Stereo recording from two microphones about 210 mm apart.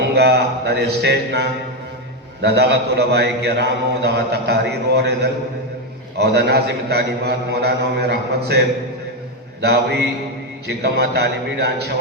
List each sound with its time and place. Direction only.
0.1 s a man's voice: 50° right (ahead or behind)